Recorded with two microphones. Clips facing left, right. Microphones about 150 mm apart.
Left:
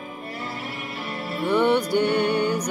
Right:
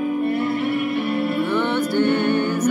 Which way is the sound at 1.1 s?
60° right (ahead or behind).